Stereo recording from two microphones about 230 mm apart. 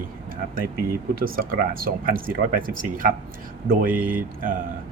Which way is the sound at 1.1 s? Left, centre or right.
Right.